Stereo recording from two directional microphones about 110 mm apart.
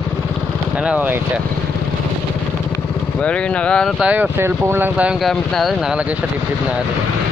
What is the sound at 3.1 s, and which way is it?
Speech, 10° left (ahead or behind).